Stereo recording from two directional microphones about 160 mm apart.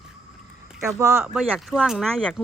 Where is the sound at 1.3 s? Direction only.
5° right (ahead or behind).